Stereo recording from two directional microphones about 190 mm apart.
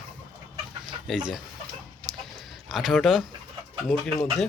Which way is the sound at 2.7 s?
Centre (ahead or behind).